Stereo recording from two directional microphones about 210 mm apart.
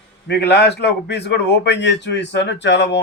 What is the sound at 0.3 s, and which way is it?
Speech, 50° left (ahead or behind).